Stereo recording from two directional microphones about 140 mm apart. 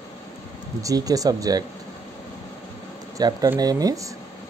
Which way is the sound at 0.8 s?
25° right (ahead or behind).